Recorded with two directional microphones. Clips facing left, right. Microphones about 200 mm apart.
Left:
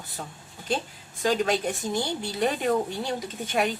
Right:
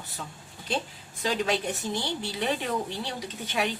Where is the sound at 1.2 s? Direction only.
45° left (ahead or behind).